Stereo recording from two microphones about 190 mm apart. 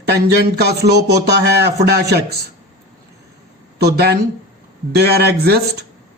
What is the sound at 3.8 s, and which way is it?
A man's voice, 55° right (ahead or behind).